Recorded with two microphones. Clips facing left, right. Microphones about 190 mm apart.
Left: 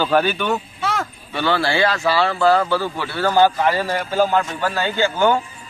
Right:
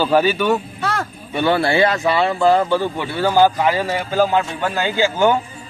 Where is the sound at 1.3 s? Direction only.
25° right (ahead or behind).